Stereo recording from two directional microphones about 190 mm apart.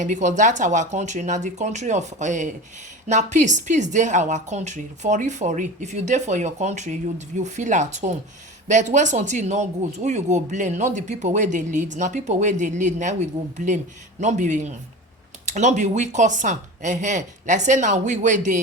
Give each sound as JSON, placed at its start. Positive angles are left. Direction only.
{"t": 0.0, "sound": "a woman's voice", "side_deg": -40}